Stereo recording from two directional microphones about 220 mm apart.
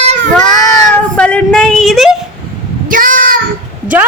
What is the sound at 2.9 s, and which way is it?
Child singing, 40° right (ahead or behind).